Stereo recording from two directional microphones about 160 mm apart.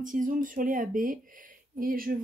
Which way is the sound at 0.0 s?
55° right (ahead or behind).